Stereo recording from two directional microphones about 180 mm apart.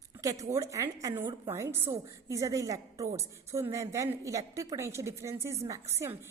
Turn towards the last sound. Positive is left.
turn(degrees=-15)  # may be behind; listen again after turning